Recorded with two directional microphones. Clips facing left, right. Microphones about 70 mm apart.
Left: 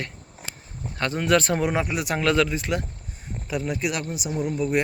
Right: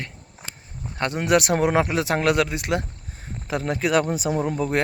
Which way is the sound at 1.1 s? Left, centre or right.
Centre.